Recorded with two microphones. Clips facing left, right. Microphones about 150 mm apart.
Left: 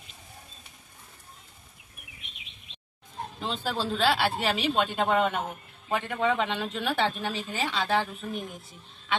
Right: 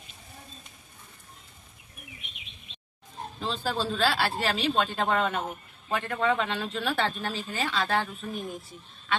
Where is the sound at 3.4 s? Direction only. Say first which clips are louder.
Right 1 dB; 20° left (ahead or behind).